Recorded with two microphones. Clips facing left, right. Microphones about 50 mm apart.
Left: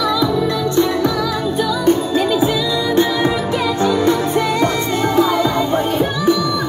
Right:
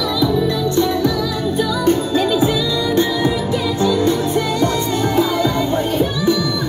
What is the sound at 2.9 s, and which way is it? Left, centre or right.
Music, left.